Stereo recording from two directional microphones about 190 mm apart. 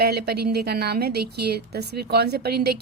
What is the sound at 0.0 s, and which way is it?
A woman's voice, 55° right (ahead or behind).